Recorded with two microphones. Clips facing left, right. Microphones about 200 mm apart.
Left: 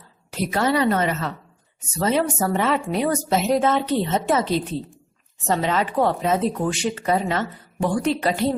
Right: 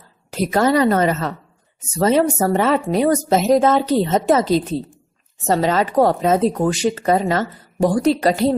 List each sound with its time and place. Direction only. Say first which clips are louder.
0.3 s speech: right 5 dB; 40° right (ahead or behind)